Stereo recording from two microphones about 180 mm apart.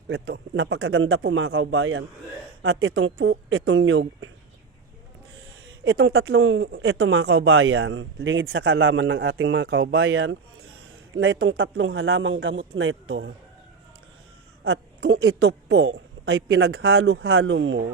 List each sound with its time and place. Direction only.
0.1 s speech: 90° right
5.8 s speech: 90° right
14.6 s a woman's voice: 80° right